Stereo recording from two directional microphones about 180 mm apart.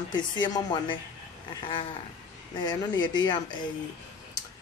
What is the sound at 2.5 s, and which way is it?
Speech, 25° left (ahead or behind).